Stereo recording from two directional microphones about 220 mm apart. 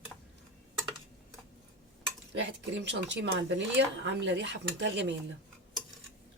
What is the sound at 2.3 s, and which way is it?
Speech, 55° right (ahead or behind).